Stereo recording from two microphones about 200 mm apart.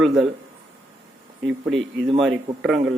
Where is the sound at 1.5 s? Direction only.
5° right (ahead or behind).